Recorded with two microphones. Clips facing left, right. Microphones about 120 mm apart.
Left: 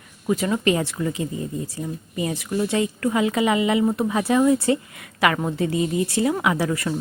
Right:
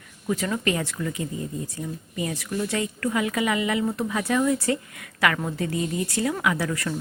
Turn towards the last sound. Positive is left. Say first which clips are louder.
# left 3 dB
turn(degrees=25)  # may be behind; listen again after turning